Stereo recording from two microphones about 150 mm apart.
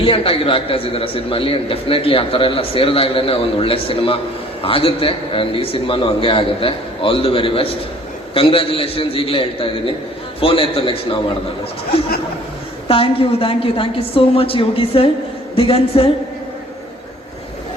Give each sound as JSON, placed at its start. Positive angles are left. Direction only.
{"t": 0.0, "sound": "a man's voice", "side_deg": 35}
{"t": 12.9, "sound": "a man's voice", "side_deg": 35}